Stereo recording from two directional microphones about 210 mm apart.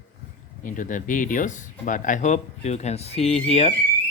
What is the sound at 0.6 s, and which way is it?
Speech, 40° left (ahead or behind).